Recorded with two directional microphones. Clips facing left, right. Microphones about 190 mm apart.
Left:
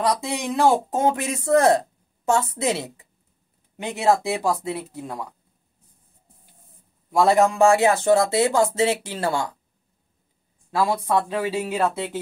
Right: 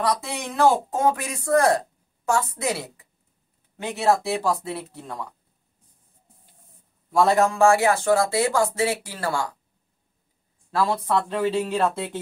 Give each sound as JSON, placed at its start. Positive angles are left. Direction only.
{"t": 0.0, "sound": "speech", "side_deg": 15}
{"t": 7.1, "sound": "speech", "side_deg": 15}
{"t": 10.7, "sound": "speech", "side_deg": 10}